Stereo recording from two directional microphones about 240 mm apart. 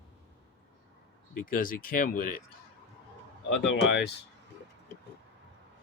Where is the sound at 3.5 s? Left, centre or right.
Left.